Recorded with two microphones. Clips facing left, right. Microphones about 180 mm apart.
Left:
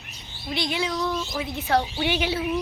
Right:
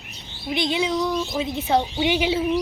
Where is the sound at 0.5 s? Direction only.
20° right (ahead or behind).